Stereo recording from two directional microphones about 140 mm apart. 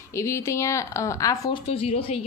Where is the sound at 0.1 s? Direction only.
20° left (ahead or behind).